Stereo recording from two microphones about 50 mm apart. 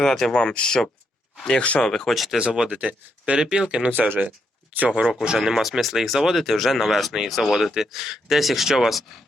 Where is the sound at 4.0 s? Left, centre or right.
Right.